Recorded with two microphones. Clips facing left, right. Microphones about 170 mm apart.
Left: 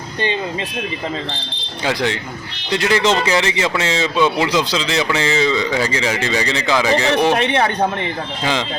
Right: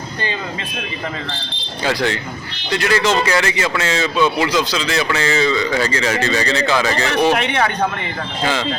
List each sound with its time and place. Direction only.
1.8 s speech: 15° left (ahead or behind)